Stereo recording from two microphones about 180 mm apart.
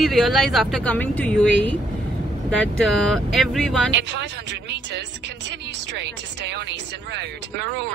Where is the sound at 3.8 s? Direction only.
75° right (ahead or behind).